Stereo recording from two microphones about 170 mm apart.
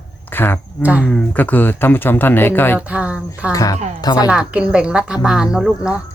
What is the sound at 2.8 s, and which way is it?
Speech, 5° right (ahead or behind).